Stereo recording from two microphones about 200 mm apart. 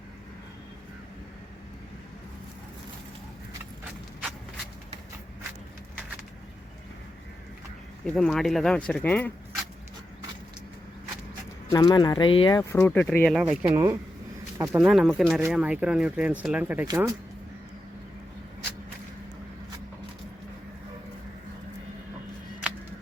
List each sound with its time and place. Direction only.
8.0 s speech: 5° left (ahead or behind)
11.7 s speech: 20° left (ahead or behind)
13.4 s speech: 5° right (ahead or behind)
14.8 s speech: centre (ahead or behind)
16.8 s speech: 20° right (ahead or behind)